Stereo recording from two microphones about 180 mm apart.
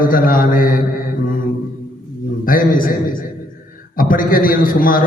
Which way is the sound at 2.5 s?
50° left (ahead or behind).